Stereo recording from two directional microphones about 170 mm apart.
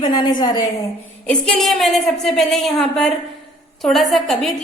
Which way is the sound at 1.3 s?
5° left (ahead or behind).